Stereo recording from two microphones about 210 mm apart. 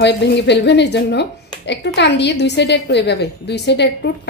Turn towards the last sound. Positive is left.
turn(degrees=55)  # may be behind; listen again after turning